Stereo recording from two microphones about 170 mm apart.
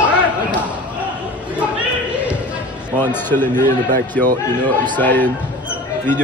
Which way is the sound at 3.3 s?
10° left (ahead or behind).